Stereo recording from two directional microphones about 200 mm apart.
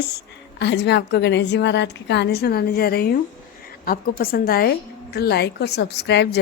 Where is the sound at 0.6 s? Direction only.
60° left (ahead or behind).